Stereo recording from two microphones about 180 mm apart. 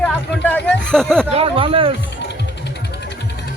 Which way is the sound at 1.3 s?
30° right (ahead or behind).